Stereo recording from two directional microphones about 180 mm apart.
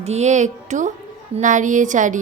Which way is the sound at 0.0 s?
40° right (ahead or behind).